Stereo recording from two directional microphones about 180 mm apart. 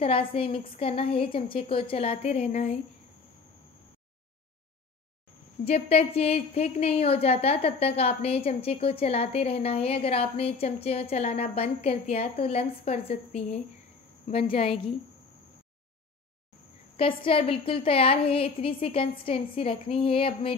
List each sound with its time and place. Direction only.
0.0 s a woman's voice: 30° left (ahead or behind)
5.7 s a woman's voice: 35° left (ahead or behind)
16.9 s a woman's voice: 30° left (ahead or behind)